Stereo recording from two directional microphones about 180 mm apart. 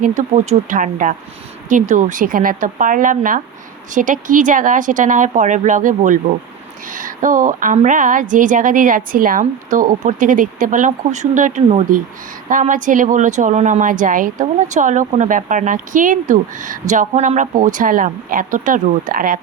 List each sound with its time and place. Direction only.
0.0 s a woman's voice: 45° right (ahead or behind)